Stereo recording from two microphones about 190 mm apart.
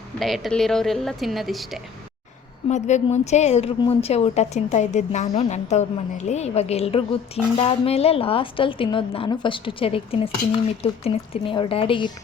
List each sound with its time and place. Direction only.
0.2 s a woman's voice: centre (ahead or behind)
2.6 s a woman's voice: 35° left (ahead or behind)